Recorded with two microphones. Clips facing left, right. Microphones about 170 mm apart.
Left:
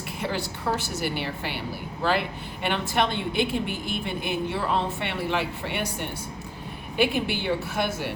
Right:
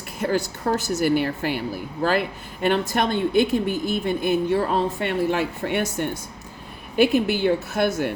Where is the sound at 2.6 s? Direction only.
45° right (ahead or behind).